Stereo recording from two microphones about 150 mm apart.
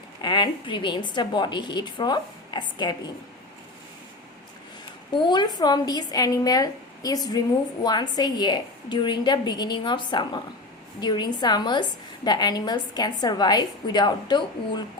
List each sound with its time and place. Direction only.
0.2 s a woman's voice: 30° left (ahead or behind)
5.1 s a woman's voice: 30° left (ahead or behind)